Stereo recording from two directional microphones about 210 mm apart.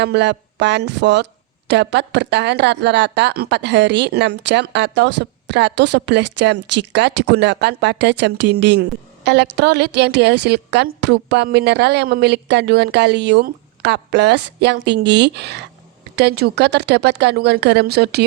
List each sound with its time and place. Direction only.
0.0 s speech: 55° right (ahead or behind)